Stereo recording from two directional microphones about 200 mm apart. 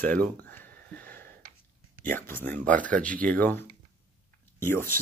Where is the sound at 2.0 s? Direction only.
10° left (ahead or behind).